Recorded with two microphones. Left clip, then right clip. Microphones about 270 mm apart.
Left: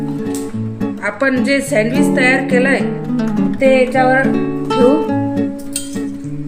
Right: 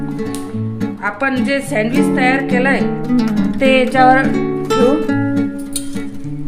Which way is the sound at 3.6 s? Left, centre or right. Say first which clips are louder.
Right 1 dB; right.